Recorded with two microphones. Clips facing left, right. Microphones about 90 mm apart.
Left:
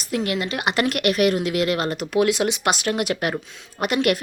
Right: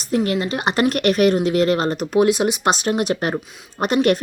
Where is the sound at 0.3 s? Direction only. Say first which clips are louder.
Right 3 dB; 30° right (ahead or behind).